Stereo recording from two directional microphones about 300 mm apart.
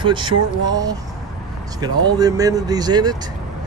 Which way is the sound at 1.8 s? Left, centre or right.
Centre.